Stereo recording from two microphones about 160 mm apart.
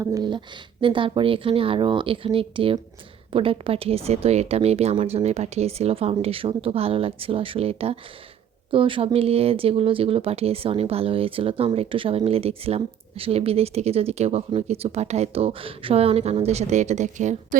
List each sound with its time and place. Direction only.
0.0 s speech: 25° right (ahead or behind); by 17.6 s 50° right (ahead or behind)